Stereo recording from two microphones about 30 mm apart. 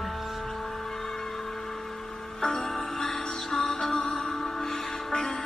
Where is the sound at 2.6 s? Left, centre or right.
Centre.